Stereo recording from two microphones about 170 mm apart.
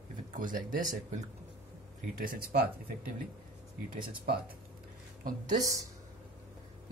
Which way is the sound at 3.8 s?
55° right (ahead or behind).